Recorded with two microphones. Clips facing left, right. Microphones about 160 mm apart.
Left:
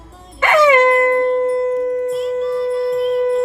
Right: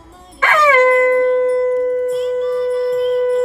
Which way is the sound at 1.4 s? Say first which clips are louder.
Right 2 dB; 25° left (ahead or behind).